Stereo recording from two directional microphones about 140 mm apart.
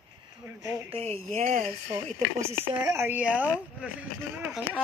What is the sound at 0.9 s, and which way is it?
Speech, 50° right (ahead or behind).